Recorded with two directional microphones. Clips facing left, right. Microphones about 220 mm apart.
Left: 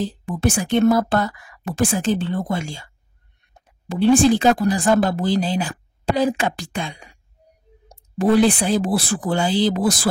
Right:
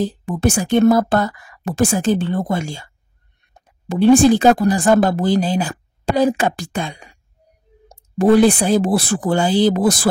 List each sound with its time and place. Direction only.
0.0 s speech: 45° right (ahead or behind)
3.9 s speech: 45° right (ahead or behind)
8.2 s speech: 45° right (ahead or behind)